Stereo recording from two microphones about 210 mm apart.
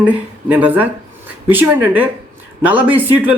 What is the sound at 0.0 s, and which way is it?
Speech, 10° right (ahead or behind).